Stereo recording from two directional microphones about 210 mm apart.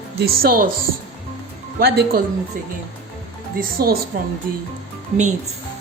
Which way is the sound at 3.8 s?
45° right (ahead or behind).